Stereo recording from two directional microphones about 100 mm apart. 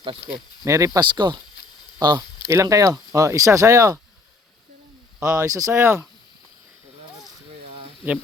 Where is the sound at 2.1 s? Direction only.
30° right (ahead or behind).